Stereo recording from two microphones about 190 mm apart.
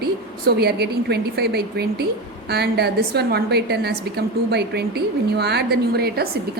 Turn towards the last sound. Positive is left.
turn(degrees=-55)  # may be behind; listen again after turning